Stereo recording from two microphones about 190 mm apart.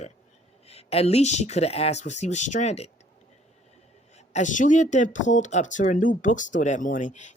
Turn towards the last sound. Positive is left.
turn(degrees=40)  # may be behind; listen again after turning